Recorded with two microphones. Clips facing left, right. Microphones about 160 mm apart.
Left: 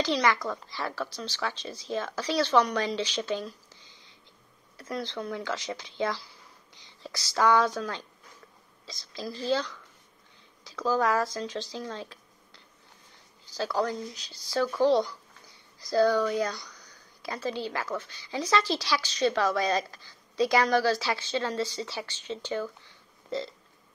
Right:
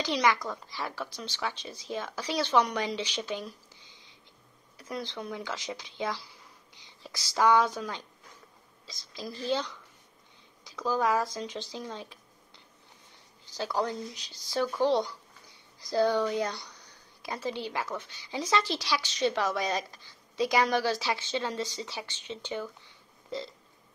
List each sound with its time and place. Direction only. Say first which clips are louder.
0.0 s speech: left 1 dB; 15° right (ahead or behind)
4.7 s speech: left 3 dB; 15° right (ahead or behind)
9.3 s a woman's voice: left 2 dB; 15° right (ahead or behind)
13.6 s a woman's voice: left 2 dB; 15° right (ahead or behind)